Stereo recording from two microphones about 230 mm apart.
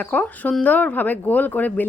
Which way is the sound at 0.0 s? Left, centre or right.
Centre.